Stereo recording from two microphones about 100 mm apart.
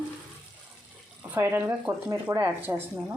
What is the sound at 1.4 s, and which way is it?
Speech, 25° right (ahead or behind).